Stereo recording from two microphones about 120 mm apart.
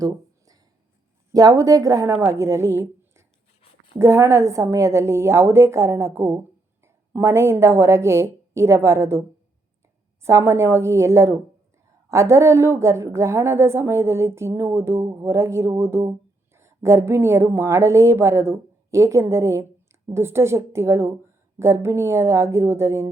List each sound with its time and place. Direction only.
0.0 s a sound: 30° right (ahead or behind)
1.3 s a woman's voice: 30° right (ahead or behind)
10.2 s a woman's voice: 20° right (ahead or behind)